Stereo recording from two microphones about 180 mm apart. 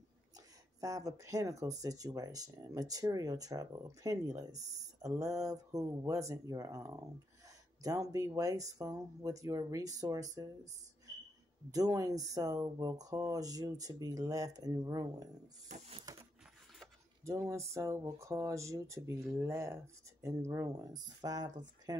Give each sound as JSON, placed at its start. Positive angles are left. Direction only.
{"t": 0.7, "sound": "speech", "side_deg": -20}
{"t": 11.7, "sound": "speech", "side_deg": -20}
{"t": 15.7, "sound": "a sound", "side_deg": -40}
{"t": 17.2, "sound": "speech", "side_deg": -15}